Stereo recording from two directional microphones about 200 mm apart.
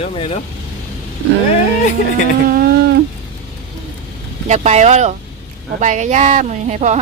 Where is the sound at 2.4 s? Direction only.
50° right (ahead or behind).